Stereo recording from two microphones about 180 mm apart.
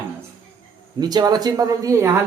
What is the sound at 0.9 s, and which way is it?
Speech, 20° right (ahead or behind).